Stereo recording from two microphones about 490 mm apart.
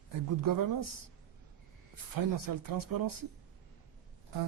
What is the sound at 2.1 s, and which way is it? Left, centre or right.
Speech, right.